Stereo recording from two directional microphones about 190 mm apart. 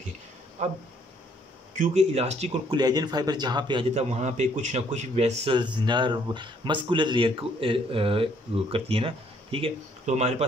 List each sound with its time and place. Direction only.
0.6 s speech: 35° right (ahead or behind)
1.8 s speech: 35° right (ahead or behind)
2.8 s a man's voice: 20° right (ahead or behind)
3.9 s a man's voice: 35° right (ahead or behind)